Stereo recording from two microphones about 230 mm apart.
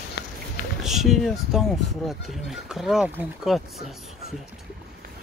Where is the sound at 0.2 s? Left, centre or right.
Left.